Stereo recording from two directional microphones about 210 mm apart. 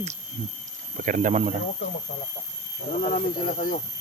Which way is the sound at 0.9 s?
40° right (ahead or behind).